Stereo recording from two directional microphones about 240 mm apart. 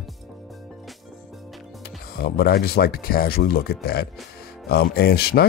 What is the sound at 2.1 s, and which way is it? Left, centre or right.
Speech, left.